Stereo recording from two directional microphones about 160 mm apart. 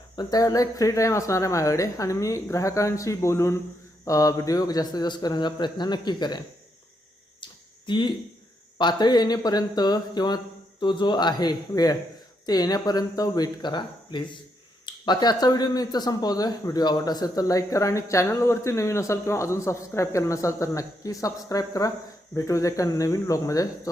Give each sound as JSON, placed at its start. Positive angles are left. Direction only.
{"t": 0.2, "sound": "speech", "side_deg": 25}
{"t": 7.4, "sound": "a sound", "side_deg": 30}
{"t": 8.8, "sound": "speech", "side_deg": 25}